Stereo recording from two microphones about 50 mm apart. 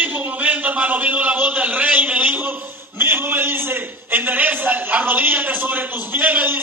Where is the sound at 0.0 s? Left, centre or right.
Right.